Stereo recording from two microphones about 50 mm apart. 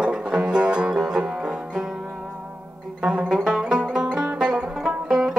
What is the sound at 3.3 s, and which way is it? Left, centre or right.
Music, centre.